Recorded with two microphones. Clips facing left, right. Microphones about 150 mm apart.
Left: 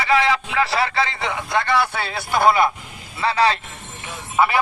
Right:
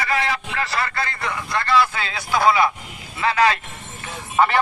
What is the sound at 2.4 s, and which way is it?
Speech, 50° left (ahead or behind).